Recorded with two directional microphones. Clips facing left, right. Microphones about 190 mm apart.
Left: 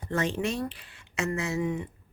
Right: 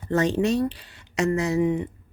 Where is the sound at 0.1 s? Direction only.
35° right (ahead or behind).